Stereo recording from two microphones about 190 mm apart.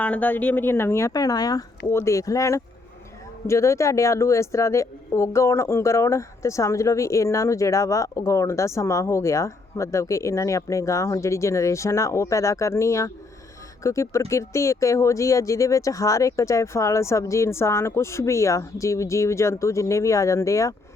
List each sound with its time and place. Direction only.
0.0 s a woman's voice: 10° left (ahead or behind)